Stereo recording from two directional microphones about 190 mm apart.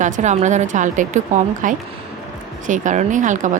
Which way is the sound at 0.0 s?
40° right (ahead or behind).